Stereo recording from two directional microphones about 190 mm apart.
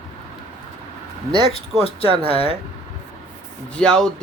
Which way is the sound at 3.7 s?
5° left (ahead or behind).